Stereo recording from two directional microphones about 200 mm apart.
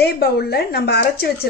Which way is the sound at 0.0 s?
55° left (ahead or behind).